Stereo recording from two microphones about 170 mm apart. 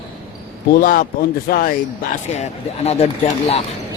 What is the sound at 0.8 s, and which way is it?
Speech, 55° left (ahead or behind).